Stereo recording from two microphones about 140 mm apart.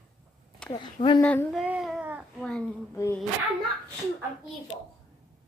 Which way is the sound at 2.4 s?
5° left (ahead or behind).